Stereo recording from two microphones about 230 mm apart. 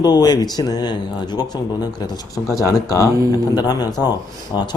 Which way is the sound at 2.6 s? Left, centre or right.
Centre.